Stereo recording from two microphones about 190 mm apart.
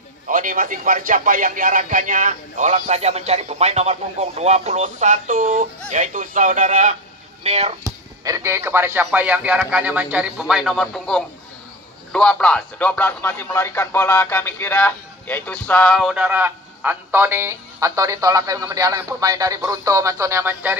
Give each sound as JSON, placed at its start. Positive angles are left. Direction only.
{"t": 0.3, "sound": "speech", "side_deg": -45}
{"t": 7.8, "sound": "a man's voice", "side_deg": -15}